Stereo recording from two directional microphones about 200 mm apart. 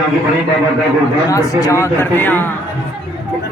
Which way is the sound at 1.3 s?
15° left (ahead or behind).